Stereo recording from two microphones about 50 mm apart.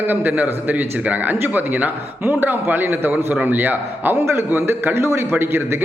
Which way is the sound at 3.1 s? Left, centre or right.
Right.